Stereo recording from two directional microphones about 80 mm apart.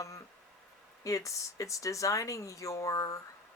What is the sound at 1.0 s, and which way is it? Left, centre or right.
Speech, left.